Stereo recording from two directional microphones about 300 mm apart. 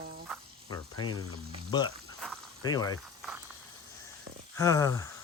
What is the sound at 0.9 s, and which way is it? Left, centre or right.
Speech, left.